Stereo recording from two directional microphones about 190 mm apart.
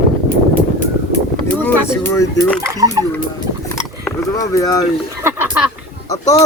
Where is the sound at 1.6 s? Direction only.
15° left (ahead or behind).